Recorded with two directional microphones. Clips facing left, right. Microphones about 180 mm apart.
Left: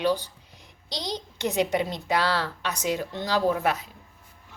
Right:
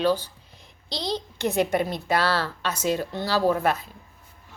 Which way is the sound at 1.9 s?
15° left (ahead or behind).